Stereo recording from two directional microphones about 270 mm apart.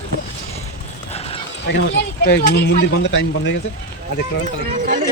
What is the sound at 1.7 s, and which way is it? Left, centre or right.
Speech, left.